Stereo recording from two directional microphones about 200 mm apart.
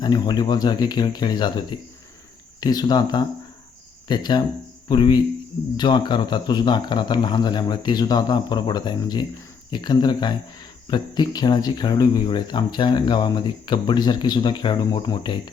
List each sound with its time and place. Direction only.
0.0 s speech: 20° left (ahead or behind)